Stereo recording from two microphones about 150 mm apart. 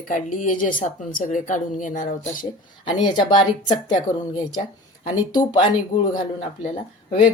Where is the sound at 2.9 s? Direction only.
30° left (ahead or behind).